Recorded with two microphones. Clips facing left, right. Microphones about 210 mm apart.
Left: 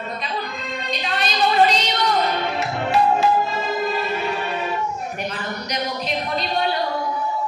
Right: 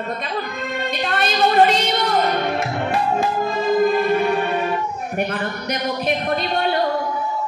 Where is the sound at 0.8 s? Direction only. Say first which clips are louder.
Right 3 dB; 50° right (ahead or behind).